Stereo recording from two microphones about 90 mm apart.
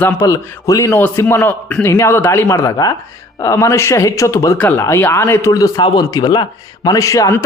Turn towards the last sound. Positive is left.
turn(degrees=35)  # may be behind; listen again after turning